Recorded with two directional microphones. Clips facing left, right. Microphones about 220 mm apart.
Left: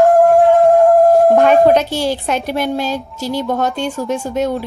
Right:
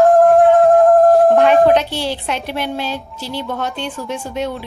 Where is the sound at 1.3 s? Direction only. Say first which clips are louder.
Left 1 dB; 45° left (ahead or behind).